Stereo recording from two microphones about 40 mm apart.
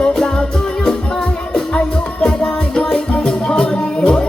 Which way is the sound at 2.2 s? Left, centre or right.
Left.